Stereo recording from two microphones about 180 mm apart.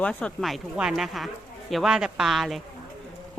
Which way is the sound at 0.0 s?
5° left (ahead or behind).